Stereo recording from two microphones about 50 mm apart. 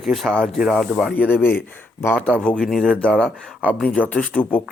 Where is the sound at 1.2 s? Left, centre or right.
Left.